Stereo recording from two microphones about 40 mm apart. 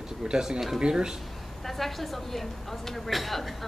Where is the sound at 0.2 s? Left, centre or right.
Centre.